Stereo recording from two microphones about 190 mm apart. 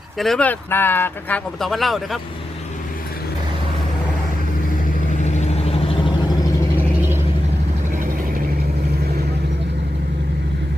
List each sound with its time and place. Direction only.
0.2 s speech: 5° left (ahead or behind)
5.2 s vehicle: 35° left (ahead or behind)
6.7 s vehicle: 10° right (ahead or behind)